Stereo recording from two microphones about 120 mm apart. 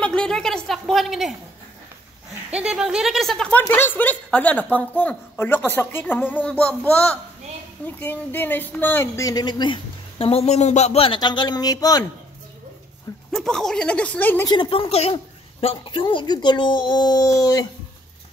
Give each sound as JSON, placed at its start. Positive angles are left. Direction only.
{"t": 0.0, "sound": "speech", "side_deg": 5}
{"t": 2.5, "sound": "speech", "side_deg": -5}
{"t": 3.6, "sound": "a woman's voice", "side_deg": 15}
{"t": 11.1, "sound": "speech", "side_deg": 35}
{"t": 13.3, "sound": "a woman's voice", "side_deg": 5}
{"t": 14.5, "sound": "speech", "side_deg": 45}
{"t": 15.6, "sound": "speech", "side_deg": 45}